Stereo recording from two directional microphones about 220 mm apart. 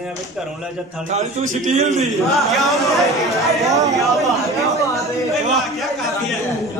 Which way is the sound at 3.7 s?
15° right (ahead or behind).